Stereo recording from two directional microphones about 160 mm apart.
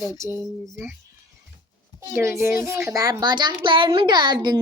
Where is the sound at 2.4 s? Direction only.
15° right (ahead or behind).